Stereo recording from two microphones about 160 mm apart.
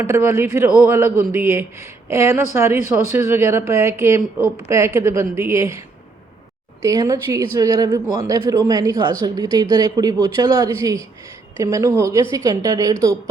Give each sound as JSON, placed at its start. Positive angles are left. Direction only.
{"t": 0.0, "sound": "a woman's voice", "side_deg": -15}
{"t": 6.8, "sound": "a woman's voice", "side_deg": -20}